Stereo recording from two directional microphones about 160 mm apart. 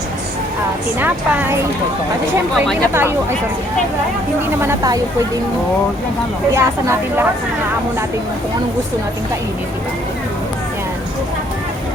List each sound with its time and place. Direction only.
0.9 s a woman's voice: 10° right (ahead or behind)
2.9 s a woman's voice: 15° right (ahead or behind)
4.6 s speech: 20° right (ahead or behind)
6.5 s a woman's voice: 20° right (ahead or behind)